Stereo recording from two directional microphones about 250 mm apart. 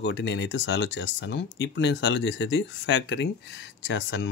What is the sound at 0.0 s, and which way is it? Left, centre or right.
Speech, left.